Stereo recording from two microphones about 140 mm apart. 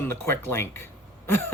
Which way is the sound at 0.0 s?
15° left (ahead or behind).